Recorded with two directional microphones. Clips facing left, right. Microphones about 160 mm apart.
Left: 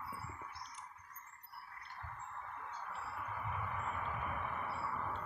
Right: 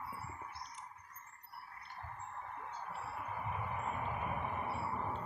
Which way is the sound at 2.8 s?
20° right (ahead or behind).